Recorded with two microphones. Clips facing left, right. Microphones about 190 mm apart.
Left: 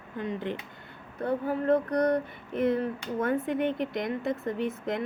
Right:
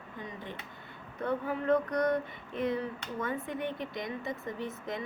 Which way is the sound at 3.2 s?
60° left (ahead or behind).